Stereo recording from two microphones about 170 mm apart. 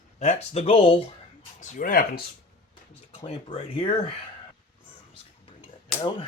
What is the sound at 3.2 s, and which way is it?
Speech, 30° left (ahead or behind).